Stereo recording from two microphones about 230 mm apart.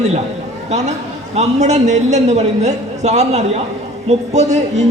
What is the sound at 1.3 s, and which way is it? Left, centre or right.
A man's voice, right.